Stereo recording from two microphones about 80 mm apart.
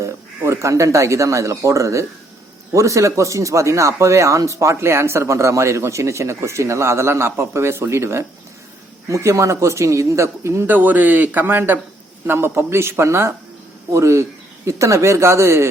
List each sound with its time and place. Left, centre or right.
0.0 s speech: right
10.7 s a man's voice: right